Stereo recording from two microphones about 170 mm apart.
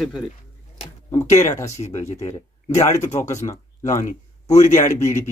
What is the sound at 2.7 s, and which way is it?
Speech, 20° left (ahead or behind).